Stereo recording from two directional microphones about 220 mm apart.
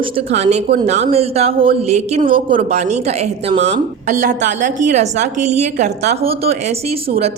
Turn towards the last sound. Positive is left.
turn(degrees=-25)  # may be behind; listen again after turning